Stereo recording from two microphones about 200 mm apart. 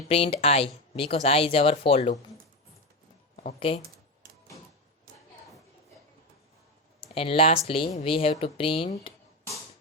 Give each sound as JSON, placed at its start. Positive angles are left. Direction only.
{"t": 0.1, "sound": "speech", "side_deg": 30}
{"t": 3.3, "sound": "speech", "side_deg": 30}
{"t": 3.8, "sound": "computer keyboard", "side_deg": -45}
{"t": 7.0, "sound": "speech", "side_deg": 30}